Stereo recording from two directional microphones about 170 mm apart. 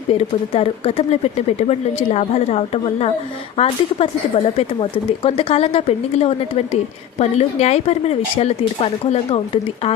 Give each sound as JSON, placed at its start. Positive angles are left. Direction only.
{"t": 0.1, "sound": "speech", "side_deg": 35}